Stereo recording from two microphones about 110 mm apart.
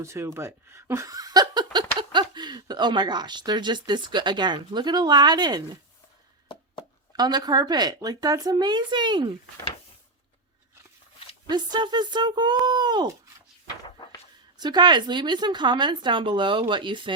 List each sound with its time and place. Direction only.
0.0 s speech: 25° right (ahead or behind)
7.2 s speech: 40° right (ahead or behind)
11.4 s speech: 40° right (ahead or behind)
14.6 s speech: 40° right (ahead or behind)